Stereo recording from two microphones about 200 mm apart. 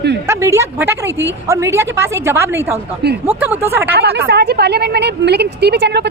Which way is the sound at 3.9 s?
55° right (ahead or behind).